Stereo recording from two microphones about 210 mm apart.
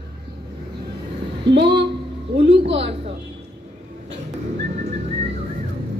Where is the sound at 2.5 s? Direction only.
55° right (ahead or behind).